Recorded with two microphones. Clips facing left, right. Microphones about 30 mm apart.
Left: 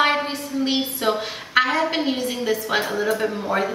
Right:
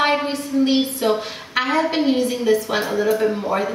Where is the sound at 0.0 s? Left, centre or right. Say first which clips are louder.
Right 1 dB; centre.